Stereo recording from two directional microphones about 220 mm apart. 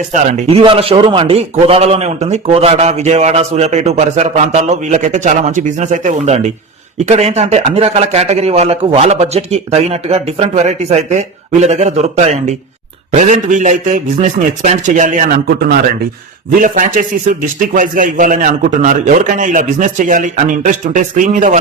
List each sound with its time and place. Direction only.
0.1 s a man's voice: 35° right (ahead or behind)